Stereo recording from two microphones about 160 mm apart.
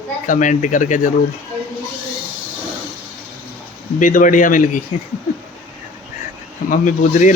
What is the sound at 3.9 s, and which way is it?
Speech, 55° left (ahead or behind).